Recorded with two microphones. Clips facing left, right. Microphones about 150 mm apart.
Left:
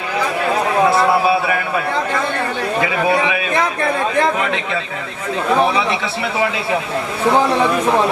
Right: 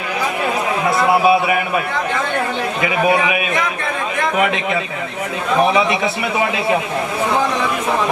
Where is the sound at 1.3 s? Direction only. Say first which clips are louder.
Right 2 dB; 15° right (ahead or behind).